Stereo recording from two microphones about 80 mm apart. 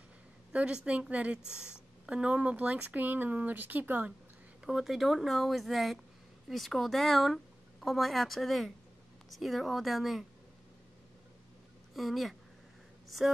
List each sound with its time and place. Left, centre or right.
0.5 s a sound: centre
0.8 s a woman's voice: centre
4.6 s speech: centre
11.9 s speech: centre